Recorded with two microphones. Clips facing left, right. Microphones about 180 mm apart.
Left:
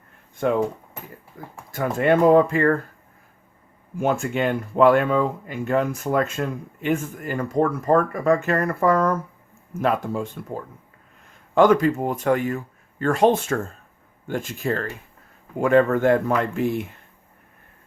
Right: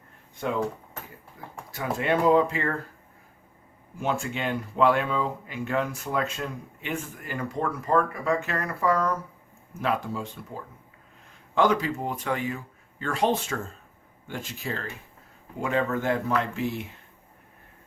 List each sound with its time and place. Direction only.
0.4 s speech: 55° left (ahead or behind)
4.0 s speech: 50° left (ahead or behind)
11.5 s speech: 50° left (ahead or behind)